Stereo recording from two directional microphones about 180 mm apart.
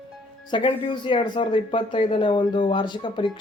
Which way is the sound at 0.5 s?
25° left (ahead or behind).